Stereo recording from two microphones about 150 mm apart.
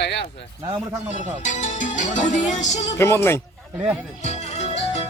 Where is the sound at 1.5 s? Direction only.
55° left (ahead or behind).